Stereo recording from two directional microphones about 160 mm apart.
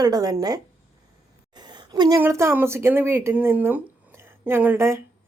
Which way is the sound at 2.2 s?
15° right (ahead or behind).